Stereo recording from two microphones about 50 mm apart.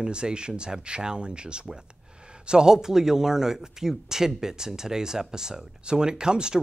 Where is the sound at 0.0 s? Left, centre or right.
Centre.